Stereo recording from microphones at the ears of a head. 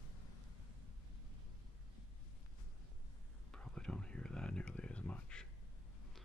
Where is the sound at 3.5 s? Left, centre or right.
Centre.